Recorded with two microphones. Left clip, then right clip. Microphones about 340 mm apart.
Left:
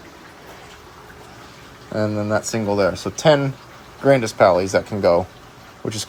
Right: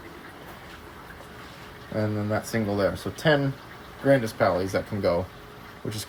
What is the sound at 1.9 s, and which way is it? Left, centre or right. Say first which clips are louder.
Speech: left 7 dB; centre.